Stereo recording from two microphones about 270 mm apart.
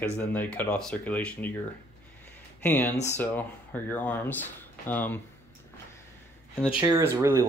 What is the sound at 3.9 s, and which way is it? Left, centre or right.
Speech, centre.